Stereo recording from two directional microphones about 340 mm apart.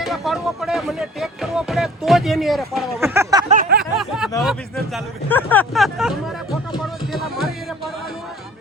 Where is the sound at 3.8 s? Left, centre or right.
Centre.